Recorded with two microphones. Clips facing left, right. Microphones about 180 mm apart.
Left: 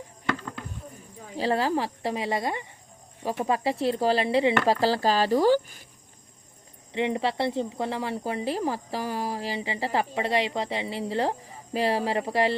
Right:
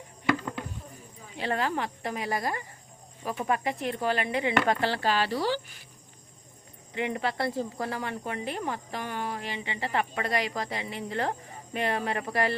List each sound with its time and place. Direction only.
1.4 s speech: 35° left (ahead or behind)
6.9 s speech: 25° left (ahead or behind)